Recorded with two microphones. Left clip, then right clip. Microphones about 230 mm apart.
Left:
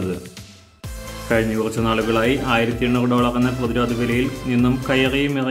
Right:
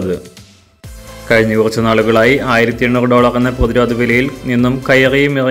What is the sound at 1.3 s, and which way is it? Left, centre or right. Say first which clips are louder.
Speech: right 9 dB; right.